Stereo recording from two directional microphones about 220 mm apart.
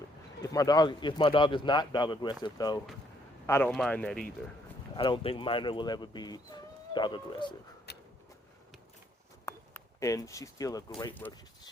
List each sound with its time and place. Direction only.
0.4 s speech: 15° left (ahead or behind)
4.9 s speech: 25° left (ahead or behind)
7.9 s a sound: 50° left (ahead or behind)
9.5 s speech: 15° left (ahead or behind)